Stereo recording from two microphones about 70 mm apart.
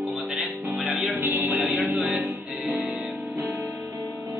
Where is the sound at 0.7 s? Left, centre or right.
Right.